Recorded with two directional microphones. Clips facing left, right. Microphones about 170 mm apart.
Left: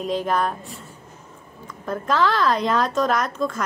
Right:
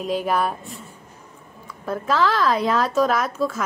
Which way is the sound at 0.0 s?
5° right (ahead or behind).